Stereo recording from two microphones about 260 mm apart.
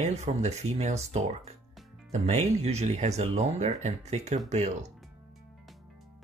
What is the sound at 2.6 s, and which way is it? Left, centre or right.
Speech, right.